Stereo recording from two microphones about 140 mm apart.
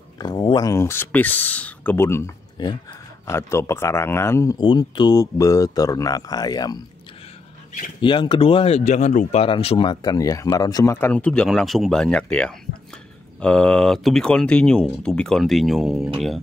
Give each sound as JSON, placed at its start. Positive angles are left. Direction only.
{"t": 0.2, "sound": "speech", "side_deg": 35}
{"t": 2.5, "sound": "speech", "side_deg": 30}
{"t": 3.3, "sound": "speech", "side_deg": 20}
{"t": 4.6, "sound": "speech", "side_deg": 35}
{"t": 8.0, "sound": "speech", "side_deg": 35}
{"t": 9.4, "sound": "speech", "side_deg": 45}